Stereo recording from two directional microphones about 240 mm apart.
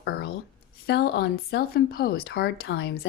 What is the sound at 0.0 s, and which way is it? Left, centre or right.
A woman's voice, left.